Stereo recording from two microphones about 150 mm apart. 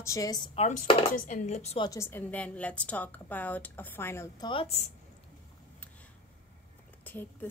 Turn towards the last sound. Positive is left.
turn(degrees=15)  # may be behind; listen again after turning